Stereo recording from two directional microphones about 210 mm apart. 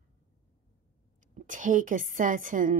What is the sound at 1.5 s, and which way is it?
Speech, 40° right (ahead or behind).